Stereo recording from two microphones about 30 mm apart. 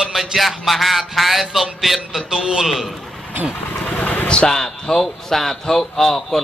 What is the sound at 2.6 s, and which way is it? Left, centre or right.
Speech, centre.